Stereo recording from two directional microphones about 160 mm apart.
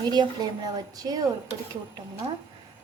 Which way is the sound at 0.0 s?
25° right (ahead or behind).